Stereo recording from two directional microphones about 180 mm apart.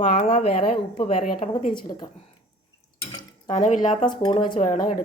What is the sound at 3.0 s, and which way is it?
Dishes, 25° left (ahead or behind).